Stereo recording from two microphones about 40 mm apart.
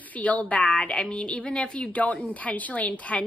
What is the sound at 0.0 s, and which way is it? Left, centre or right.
A woman's voice, left.